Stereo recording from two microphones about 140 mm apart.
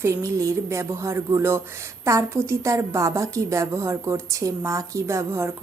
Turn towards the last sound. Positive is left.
turn(degrees=-20)  # may be behind; listen again after turning